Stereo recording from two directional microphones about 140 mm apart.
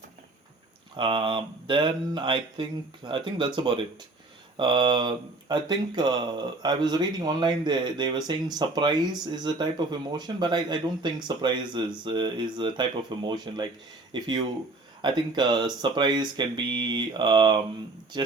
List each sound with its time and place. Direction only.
0.9 s speech: 35° right (ahead or behind)